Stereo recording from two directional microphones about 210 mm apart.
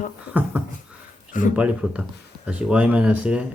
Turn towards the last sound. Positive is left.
turn(degrees=-5)  # may be behind; listen again after turning